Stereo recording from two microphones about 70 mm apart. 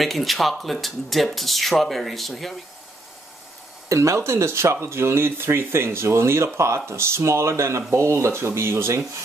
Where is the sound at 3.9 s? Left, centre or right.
Right.